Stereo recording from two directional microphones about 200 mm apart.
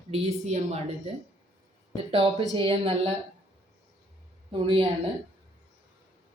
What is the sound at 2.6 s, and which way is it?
Speech, 30° right (ahead or behind).